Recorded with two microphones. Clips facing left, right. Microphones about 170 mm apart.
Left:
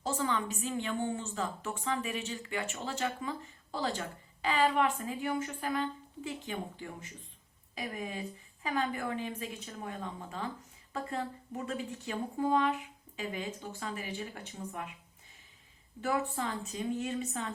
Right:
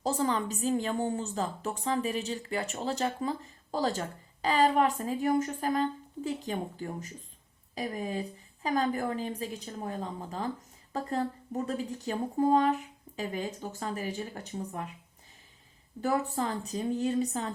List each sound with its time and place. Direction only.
0.0 s a woman's voice: 35° right (ahead or behind)
16.0 s a woman's voice: 40° right (ahead or behind)